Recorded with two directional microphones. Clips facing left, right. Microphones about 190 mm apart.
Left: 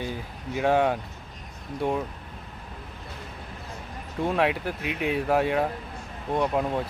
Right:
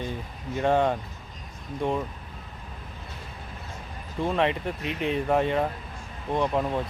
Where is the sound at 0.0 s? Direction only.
5° left (ahead or behind).